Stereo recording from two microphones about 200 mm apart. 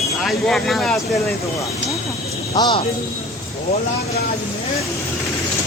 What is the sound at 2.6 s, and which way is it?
Speech, 25° left (ahead or behind).